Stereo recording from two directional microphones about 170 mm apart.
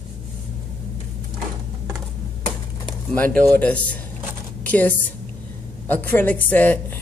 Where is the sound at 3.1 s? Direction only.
10° left (ahead or behind).